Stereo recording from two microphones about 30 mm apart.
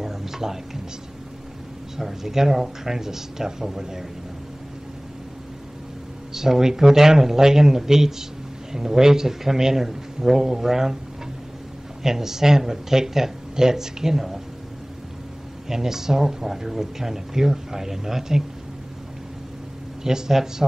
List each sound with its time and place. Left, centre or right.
0.0 s speech: centre
2.0 s speech: centre
6.3 s speech: centre
12.0 s speech: centre
15.7 s speech: centre
20.0 s speech: centre